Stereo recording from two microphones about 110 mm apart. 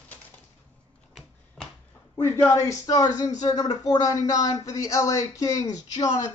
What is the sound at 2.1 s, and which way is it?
Speech, 20° left (ahead or behind).